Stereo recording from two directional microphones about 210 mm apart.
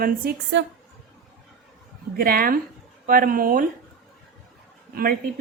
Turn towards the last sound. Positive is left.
turn(degrees=-45)  # may be behind; listen again after turning